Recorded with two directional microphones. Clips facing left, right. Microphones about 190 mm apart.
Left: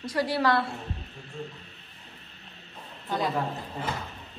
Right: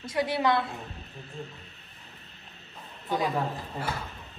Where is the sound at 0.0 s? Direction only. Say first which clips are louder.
Left 1 dB; 20° right (ahead or behind).